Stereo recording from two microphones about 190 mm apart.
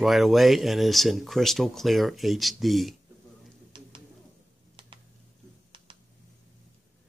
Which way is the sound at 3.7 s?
25° right (ahead or behind).